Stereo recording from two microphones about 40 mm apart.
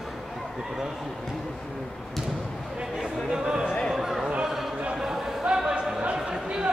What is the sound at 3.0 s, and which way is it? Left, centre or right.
Music, centre.